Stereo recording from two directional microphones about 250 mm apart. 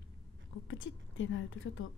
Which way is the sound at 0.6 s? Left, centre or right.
Left.